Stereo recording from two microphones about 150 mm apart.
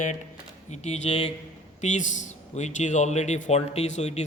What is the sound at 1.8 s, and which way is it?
A man's voice, 55° left (ahead or behind).